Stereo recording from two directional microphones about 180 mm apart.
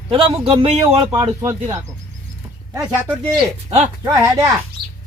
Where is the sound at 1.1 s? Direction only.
15° right (ahead or behind).